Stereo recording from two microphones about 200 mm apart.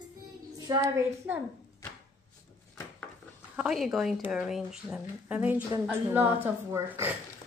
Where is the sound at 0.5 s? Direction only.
15° right (ahead or behind).